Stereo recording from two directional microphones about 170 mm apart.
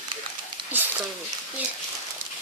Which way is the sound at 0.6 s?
30° right (ahead or behind).